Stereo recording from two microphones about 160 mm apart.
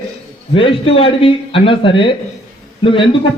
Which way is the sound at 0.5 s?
35° left (ahead or behind).